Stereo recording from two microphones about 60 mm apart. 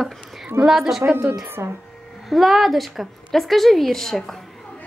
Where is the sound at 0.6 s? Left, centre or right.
Right.